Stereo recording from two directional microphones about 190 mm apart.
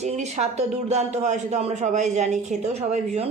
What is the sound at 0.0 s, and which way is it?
Speech, 35° right (ahead or behind).